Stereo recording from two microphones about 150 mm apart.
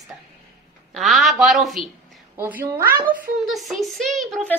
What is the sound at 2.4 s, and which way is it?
Speech, 15° right (ahead or behind).